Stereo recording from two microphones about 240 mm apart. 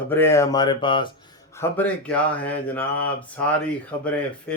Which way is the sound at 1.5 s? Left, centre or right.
Centre.